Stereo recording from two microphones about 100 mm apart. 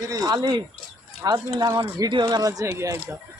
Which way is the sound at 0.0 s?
40° right (ahead or behind).